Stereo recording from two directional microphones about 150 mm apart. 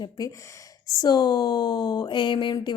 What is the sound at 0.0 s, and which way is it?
Speech, 25° left (ahead or behind).